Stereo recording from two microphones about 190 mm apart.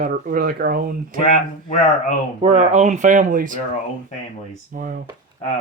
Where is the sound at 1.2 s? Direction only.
40° left (ahead or behind).